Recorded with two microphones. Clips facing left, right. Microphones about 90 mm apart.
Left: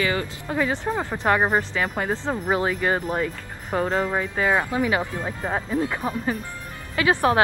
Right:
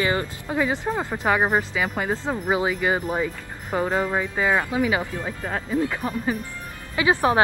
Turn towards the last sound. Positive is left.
turn(degrees=-15)  # may be behind; listen again after turning